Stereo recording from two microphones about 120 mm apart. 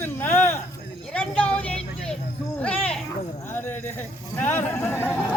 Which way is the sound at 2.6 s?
10° left (ahead or behind).